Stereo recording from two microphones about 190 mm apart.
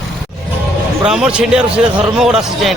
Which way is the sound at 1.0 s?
5° right (ahead or behind).